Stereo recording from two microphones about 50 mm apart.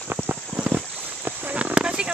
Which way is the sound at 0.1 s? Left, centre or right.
Right.